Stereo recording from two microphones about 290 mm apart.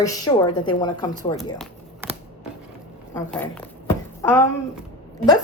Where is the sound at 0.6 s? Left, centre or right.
Centre.